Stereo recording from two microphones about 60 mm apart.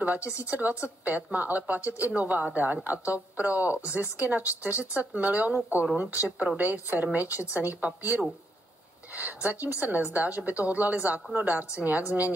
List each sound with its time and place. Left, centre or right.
0.0 s a woman's voice: right